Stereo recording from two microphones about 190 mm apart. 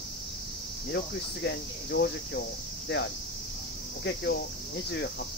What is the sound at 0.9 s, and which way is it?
Speech, 65° left (ahead or behind).